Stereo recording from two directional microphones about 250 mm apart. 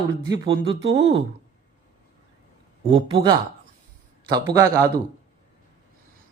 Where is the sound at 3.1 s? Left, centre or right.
Centre.